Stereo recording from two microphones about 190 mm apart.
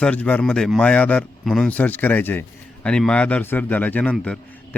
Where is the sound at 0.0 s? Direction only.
10° left (ahead or behind).